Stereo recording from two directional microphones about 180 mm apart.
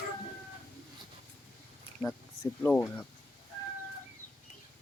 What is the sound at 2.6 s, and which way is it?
Speech, 10° left (ahead or behind).